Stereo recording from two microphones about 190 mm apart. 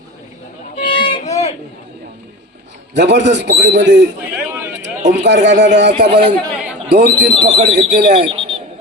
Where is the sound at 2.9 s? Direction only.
70° right (ahead or behind).